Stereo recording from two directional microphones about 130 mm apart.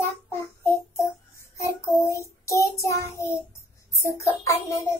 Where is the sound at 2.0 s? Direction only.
25° left (ahead or behind).